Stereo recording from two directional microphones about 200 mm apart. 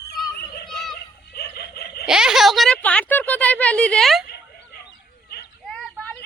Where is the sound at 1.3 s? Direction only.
50° left (ahead or behind).